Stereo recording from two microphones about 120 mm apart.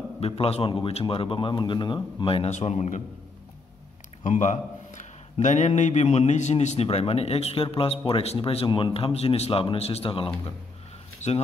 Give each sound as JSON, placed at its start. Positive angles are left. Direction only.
{"t": 0.2, "sound": "a man's voice", "side_deg": 55}
{"t": 2.2, "sound": "a man's voice", "side_deg": 50}
{"t": 2.5, "sound": "a man's voice", "side_deg": 65}
{"t": 4.2, "sound": "a man's voice", "side_deg": 90}
{"t": 11.1, "sound": "a sound", "side_deg": 65}